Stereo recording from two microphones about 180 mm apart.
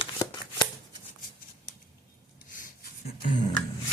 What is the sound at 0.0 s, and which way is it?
Shuffling cards, 25° left (ahead or behind).